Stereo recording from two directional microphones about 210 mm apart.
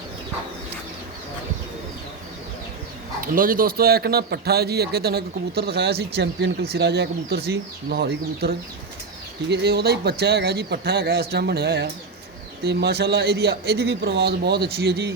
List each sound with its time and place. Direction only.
3.2 s a man's voice: 40° right (ahead or behind)